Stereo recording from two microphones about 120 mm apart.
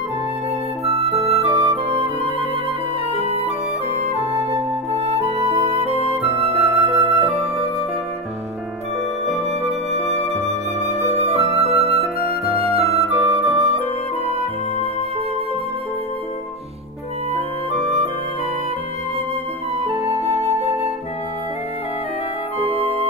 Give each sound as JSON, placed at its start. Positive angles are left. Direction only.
{"t": 0.8, "sound": "flute", "side_deg": -60}
{"t": 3.2, "sound": "flute", "side_deg": -60}
{"t": 4.0, "sound": "music", "side_deg": -60}
{"t": 5.1, "sound": "flute", "side_deg": -65}
{"t": 9.5, "sound": "music", "side_deg": -65}
{"t": 11.2, "sound": "flute", "side_deg": -60}
{"t": 17.7, "sound": "music", "side_deg": -55}
{"t": 19.8, "sound": "flute", "side_deg": -55}